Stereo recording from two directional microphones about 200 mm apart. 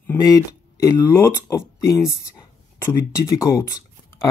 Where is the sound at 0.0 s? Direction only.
10° left (ahead or behind).